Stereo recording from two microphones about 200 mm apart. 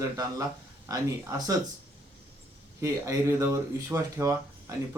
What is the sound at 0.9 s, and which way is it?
Speech, 15° right (ahead or behind).